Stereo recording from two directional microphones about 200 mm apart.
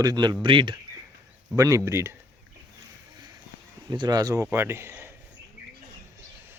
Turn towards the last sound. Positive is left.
turn(degrees=-10)  # may be behind; listen again after turning